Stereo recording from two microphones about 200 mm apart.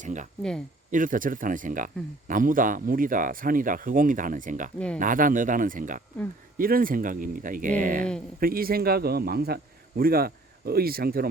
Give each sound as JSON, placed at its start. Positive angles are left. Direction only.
{"t": 0.0, "sound": "speech", "side_deg": -40}